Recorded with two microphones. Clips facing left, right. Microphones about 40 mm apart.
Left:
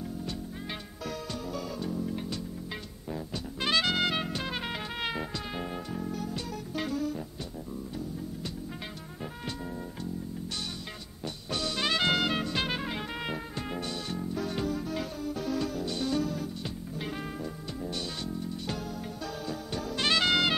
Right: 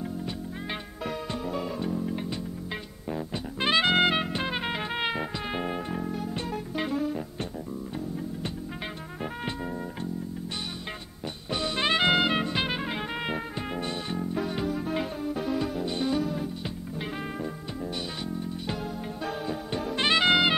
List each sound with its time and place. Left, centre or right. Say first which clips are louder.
1.0 s music: right 4 dB; right
11.5 s music: right 4 dB; right
14.9 s music: right 4 dB; right
19.2 s music: right 6 dB; right